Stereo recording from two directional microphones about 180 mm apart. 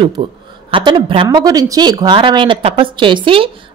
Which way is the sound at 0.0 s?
30° right (ahead or behind).